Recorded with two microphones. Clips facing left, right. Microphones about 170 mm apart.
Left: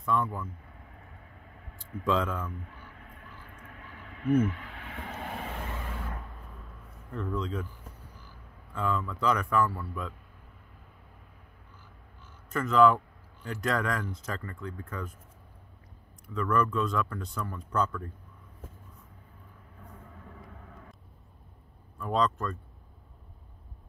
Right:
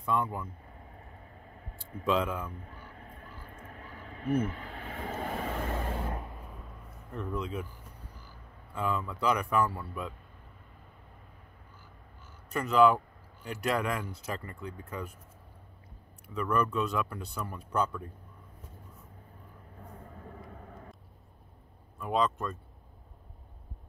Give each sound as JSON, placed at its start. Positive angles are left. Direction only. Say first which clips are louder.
{"t": 0.0, "sound": "speech", "louder": "left 1 dB", "side_deg": -15}
{"t": 2.0, "sound": "speech", "louder": "even", "side_deg": -15}
{"t": 2.5, "sound": "a sound", "louder": "left 2 dB", "side_deg": -40}
{"t": 6.1, "sound": "vehicle", "louder": "right 3 dB", "side_deg": -15}
{"t": 8.7, "sound": "speech", "louder": "left 1 dB", "side_deg": -15}
{"t": 12.5, "sound": "speech", "louder": "left 1 dB", "side_deg": -15}
{"t": 14.0, "sound": "speech", "louder": "left 1 dB", "side_deg": -10}
{"t": 16.3, "sound": "speech", "louder": "left 2 dB", "side_deg": -15}
{"t": 22.0, "sound": "speech", "louder": "left 1 dB", "side_deg": -5}